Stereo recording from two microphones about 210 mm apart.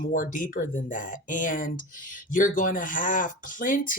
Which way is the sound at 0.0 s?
40° left (ahead or behind).